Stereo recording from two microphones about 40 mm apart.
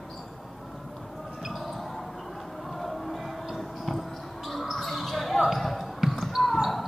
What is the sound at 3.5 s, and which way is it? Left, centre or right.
Basketball bounce, centre.